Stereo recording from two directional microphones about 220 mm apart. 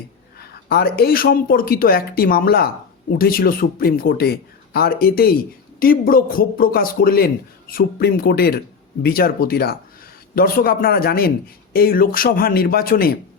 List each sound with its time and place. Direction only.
0.3 s a man's voice: 45° left (ahead or behind)